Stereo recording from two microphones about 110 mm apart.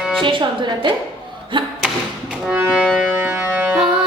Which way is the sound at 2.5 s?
10° right (ahead or behind).